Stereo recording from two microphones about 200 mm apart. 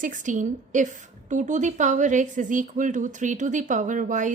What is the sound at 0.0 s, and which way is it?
A woman's voice, 40° right (ahead or behind).